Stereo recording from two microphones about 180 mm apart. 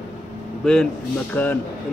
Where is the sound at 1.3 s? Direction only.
10° left (ahead or behind).